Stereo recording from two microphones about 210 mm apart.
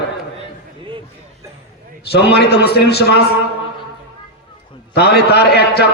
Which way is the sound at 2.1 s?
50° left (ahead or behind).